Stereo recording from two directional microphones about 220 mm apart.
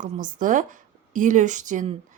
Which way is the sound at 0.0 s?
35° right (ahead or behind).